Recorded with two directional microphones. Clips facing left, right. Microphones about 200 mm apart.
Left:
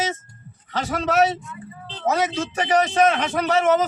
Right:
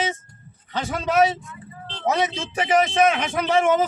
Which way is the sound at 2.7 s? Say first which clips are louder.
Even; 35° left (ahead or behind).